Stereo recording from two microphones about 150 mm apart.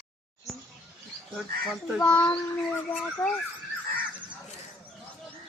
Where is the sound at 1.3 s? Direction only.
Centre (ahead or behind).